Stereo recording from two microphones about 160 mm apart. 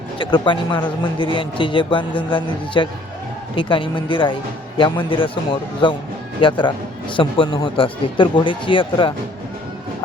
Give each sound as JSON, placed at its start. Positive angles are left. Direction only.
{"t": 0.2, "sound": "a man's voice", "side_deg": 30}